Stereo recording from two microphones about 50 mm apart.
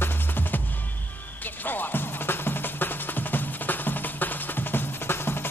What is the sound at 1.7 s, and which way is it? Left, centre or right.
Music, left.